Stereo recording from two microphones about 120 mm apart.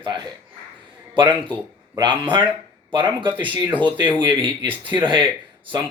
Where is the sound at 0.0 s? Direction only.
40° right (ahead or behind).